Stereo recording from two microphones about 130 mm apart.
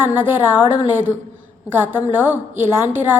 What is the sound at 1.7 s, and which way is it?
Speech, 15° right (ahead or behind).